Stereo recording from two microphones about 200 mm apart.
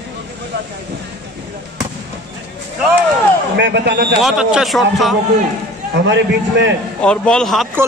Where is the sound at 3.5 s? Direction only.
55° right (ahead or behind).